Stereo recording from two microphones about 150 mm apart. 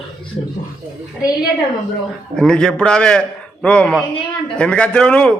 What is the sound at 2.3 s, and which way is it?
A man's voice, 5° left (ahead or behind).